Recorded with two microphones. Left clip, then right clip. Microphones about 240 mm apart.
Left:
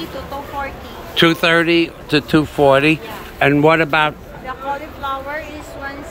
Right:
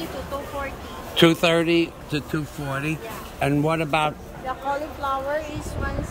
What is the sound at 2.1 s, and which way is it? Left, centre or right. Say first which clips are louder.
Speech: left 15 dB; left.